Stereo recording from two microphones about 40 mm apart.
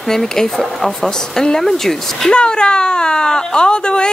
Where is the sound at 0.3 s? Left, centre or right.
Centre.